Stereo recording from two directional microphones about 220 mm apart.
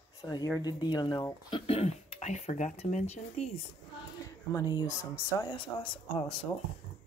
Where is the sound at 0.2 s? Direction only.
15° left (ahead or behind).